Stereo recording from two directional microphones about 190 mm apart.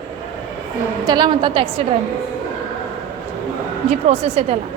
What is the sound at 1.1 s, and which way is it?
Speech, 25° right (ahead or behind).